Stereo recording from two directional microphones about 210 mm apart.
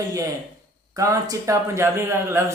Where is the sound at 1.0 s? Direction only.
15° right (ahead or behind).